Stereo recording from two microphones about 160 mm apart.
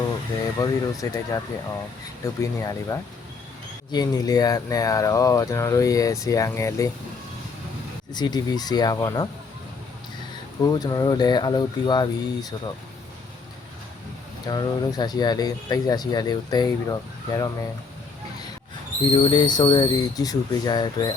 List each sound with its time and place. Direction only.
0.6 s speech: 20° left (ahead or behind)
8.1 s speech: 25° left (ahead or behind)
10.6 s speech: 25° left (ahead or behind)
14.4 s speech: 25° left (ahead or behind)
19.1 s speech: 30° left (ahead or behind)